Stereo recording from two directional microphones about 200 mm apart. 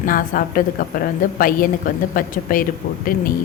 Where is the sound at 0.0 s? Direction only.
45° left (ahead or behind).